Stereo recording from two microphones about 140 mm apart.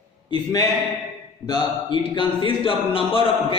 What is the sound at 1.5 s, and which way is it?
Speech, 30° left (ahead or behind).